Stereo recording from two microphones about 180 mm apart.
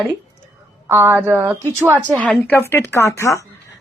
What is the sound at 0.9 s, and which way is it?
A woman's voice, 10° right (ahead or behind).